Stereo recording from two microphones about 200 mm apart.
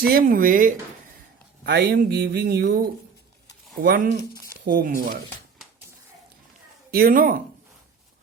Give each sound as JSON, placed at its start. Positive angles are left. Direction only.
{"t": 0.1, "sound": "speech", "side_deg": -45}
{"t": 6.9, "sound": "speech", "side_deg": -45}